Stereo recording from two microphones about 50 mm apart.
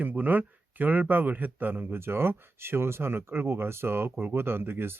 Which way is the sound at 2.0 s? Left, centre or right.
Right.